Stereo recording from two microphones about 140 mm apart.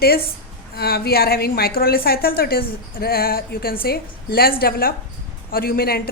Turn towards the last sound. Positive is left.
turn(degrees=90)